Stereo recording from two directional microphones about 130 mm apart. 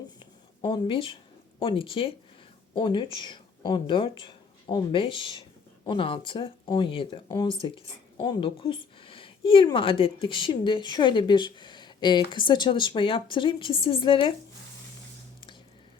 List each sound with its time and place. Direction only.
0.6 s speech: 40° left (ahead or behind)
8.2 s speech: 30° left (ahead or behind)
8.4 s speech: 40° left (ahead or behind)